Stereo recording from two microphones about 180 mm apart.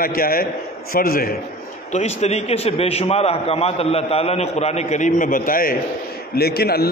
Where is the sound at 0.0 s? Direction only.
55° left (ahead or behind).